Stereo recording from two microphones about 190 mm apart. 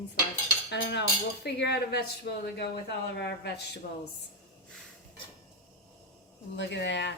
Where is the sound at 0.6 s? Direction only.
65° left (ahead or behind).